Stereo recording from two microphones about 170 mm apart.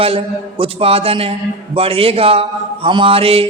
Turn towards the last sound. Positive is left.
turn(degrees=-35)  # may be behind; listen again after turning